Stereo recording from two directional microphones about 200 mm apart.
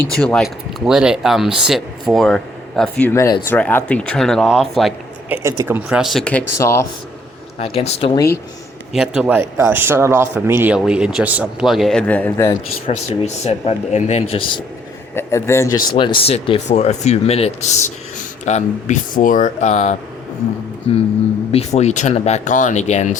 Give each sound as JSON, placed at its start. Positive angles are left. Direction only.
{"t": 0.2, "sound": "a man's voice", "side_deg": 5}
{"t": 5.4, "sound": "a man's voice", "side_deg": -15}
{"t": 7.6, "sound": "speech", "side_deg": 30}
{"t": 8.9, "sound": "a man's voice", "side_deg": -5}
{"t": 12.9, "sound": "speech", "side_deg": 30}
{"t": 15.1, "sound": "speech", "side_deg": 15}
{"t": 16.2, "sound": "speech", "side_deg": 30}
{"t": 21.5, "sound": "speech", "side_deg": 35}